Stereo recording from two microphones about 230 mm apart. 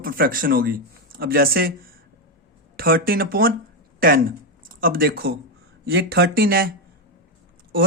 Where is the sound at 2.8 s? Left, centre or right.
Right.